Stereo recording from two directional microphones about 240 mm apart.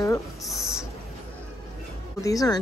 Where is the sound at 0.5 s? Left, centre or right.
Centre.